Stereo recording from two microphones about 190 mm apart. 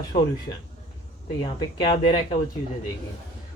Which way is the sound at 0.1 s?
40° left (ahead or behind).